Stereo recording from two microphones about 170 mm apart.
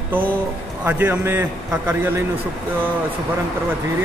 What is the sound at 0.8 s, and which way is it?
Speech, 10° right (ahead or behind).